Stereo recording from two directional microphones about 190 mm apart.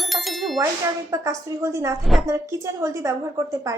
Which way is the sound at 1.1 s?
15° right (ahead or behind).